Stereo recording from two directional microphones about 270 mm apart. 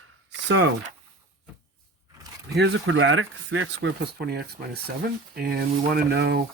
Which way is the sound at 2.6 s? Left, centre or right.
Right.